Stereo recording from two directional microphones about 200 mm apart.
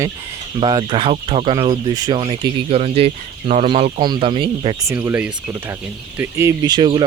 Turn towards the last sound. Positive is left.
turn(degrees=-25)  # may be behind; listen again after turning